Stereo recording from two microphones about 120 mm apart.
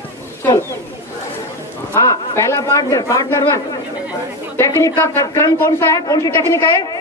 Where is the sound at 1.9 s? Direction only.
25° left (ahead or behind).